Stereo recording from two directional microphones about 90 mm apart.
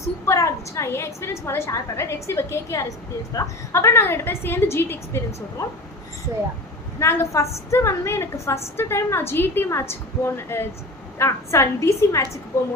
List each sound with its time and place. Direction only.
0.3 s a woman's voice: 35° left (ahead or behind)
5.6 s a woman's voice: 35° left (ahead or behind)
7.0 s a woman's voice: 30° left (ahead or behind)